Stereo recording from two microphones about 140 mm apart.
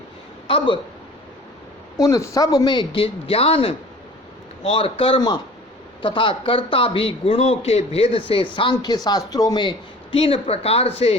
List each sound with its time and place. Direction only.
0.4 s speech: 40° left (ahead or behind)
2.0 s a man's voice: 25° left (ahead or behind); by 11.2 s 45° left (ahead or behind)